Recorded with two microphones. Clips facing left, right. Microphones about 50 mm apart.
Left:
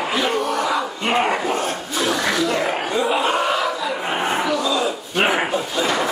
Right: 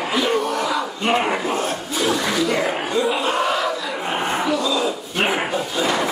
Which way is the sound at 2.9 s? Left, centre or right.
Centre.